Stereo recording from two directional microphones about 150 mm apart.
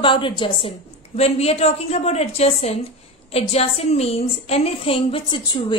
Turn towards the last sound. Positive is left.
turn(degrees=30)  # may be behind; listen again after turning